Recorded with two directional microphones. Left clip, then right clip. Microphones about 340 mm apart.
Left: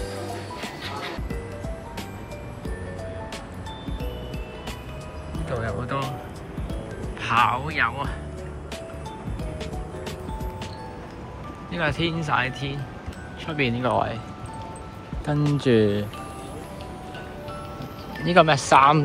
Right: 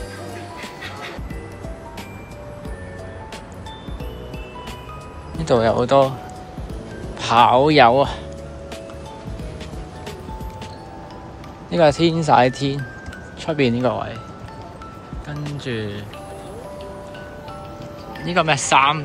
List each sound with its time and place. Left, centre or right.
5.5 s speech: centre
7.2 s speech: centre
11.7 s speech: centre
15.2 s speech: centre
18.2 s speech: centre